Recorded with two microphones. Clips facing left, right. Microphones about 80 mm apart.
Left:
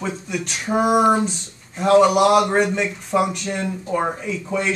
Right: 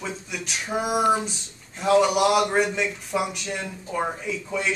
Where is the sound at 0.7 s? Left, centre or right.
Left.